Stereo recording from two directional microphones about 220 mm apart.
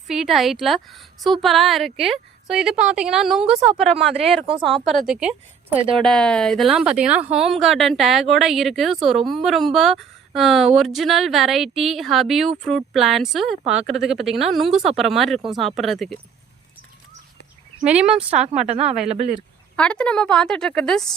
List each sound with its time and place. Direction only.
0.1 s a woman's voice: centre (ahead or behind)
17.8 s a woman's voice: 5° right (ahead or behind)
18.3 s speech: 30° right (ahead or behind)
19.7 s a woman's voice: 5° left (ahead or behind)